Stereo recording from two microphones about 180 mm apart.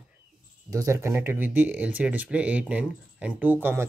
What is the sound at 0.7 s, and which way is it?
Speech, 15° right (ahead or behind).